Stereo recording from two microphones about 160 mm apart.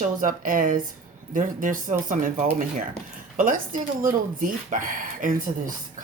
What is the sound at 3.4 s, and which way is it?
Speech, 60° right (ahead or behind).